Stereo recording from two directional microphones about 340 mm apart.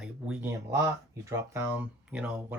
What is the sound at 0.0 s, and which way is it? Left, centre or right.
Speech, centre.